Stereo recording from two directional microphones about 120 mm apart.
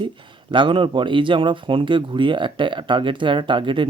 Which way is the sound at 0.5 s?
45° right (ahead or behind).